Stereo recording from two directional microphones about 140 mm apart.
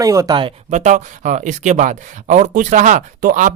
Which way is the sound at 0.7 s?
60° right (ahead or behind).